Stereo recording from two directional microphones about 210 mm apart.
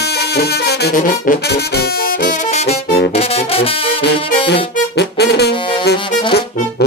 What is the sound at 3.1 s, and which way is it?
Brass instrument, 30° left (ahead or behind).